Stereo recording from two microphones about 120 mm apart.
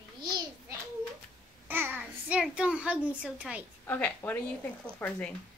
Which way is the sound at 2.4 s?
5° right (ahead or behind).